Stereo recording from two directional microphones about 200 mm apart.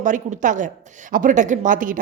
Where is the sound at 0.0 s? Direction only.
40° right (ahead or behind).